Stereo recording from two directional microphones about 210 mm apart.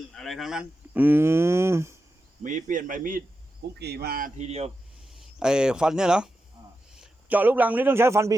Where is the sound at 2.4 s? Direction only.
40° right (ahead or behind).